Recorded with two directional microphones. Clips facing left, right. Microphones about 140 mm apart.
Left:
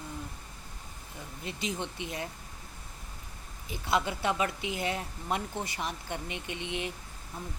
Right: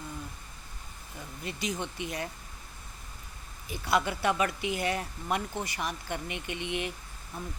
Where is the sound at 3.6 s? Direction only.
25° left (ahead or behind).